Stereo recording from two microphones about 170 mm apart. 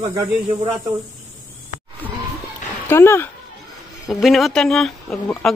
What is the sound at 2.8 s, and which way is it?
Speech, 15° left (ahead or behind).